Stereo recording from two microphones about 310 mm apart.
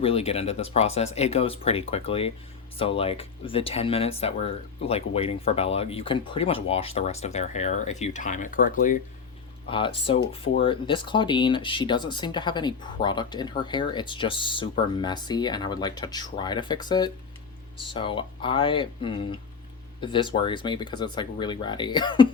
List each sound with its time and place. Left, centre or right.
0.0 s speech: centre